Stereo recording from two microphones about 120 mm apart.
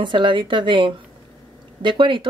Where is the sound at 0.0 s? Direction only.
45° right (ahead or behind).